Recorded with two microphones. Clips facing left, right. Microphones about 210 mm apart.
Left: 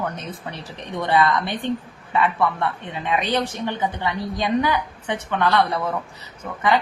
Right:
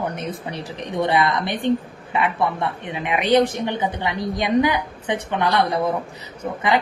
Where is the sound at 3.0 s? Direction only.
15° right (ahead or behind).